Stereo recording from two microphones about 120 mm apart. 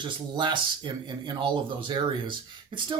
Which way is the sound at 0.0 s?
40° right (ahead or behind).